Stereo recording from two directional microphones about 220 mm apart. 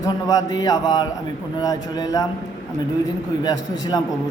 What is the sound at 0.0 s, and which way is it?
A man's voice, 15° left (ahead or behind).